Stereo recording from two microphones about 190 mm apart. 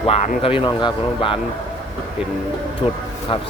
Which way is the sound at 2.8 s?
30° left (ahead or behind).